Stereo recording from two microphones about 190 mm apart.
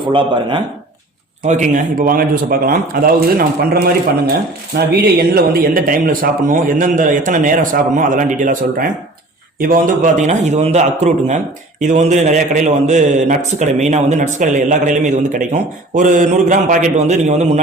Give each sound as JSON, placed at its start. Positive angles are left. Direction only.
{"t": 0.0, "sound": "speech", "side_deg": -25}
{"t": 1.5, "sound": "a man's voice", "side_deg": -40}